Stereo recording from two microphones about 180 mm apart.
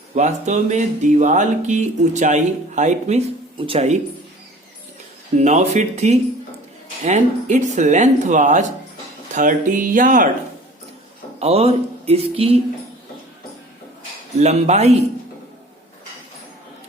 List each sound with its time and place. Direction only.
0.1 s speech: 40° right (ahead or behind)
5.4 s speech: 40° right (ahead or behind)
11.3 s speech: 35° right (ahead or behind)
14.3 s speech: 40° right (ahead or behind)